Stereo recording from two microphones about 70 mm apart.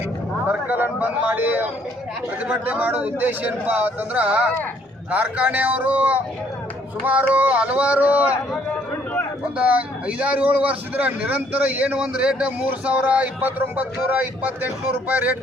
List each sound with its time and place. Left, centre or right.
0.4 s a man's voice: right
9.6 s a man's voice: right